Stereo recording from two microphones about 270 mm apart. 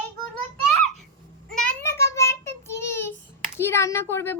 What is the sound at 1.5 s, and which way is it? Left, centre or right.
Child singing, centre.